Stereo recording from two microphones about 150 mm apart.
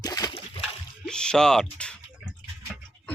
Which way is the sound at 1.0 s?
5° left (ahead or behind).